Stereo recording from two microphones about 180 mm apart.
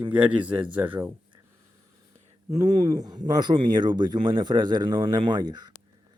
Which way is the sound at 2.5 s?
20° right (ahead or behind).